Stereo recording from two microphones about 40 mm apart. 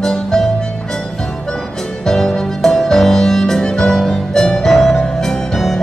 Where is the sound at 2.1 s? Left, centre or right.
Centre.